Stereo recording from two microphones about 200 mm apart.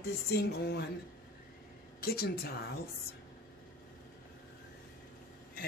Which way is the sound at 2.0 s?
50° left (ahead or behind).